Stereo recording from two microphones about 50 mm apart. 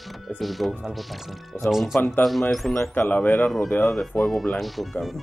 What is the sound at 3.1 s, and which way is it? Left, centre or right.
Speech, left.